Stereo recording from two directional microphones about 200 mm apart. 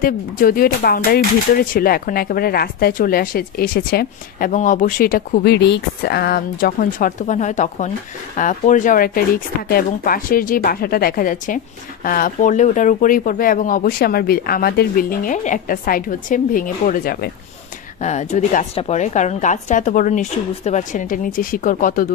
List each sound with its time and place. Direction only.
0.0 s speech: 45° left (ahead or behind)
18.0 s a woman's voice: 35° left (ahead or behind)